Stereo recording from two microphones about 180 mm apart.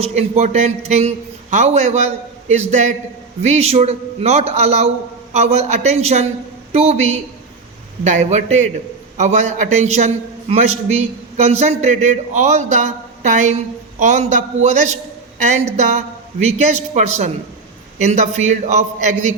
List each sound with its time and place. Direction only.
0.0 s a man's voice: 35° right (ahead or behind)